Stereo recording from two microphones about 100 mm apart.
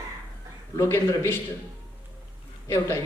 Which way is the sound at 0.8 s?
20° left (ahead or behind).